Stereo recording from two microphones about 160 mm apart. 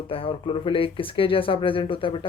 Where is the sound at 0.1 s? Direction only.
35° left (ahead or behind).